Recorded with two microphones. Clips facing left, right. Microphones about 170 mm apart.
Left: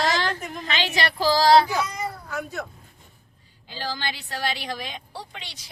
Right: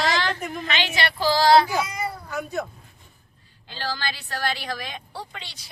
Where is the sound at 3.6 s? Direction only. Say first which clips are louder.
Right 1 dB; 15° left (ahead or behind).